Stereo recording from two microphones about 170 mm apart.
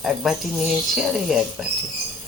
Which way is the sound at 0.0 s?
Centre (ahead or behind).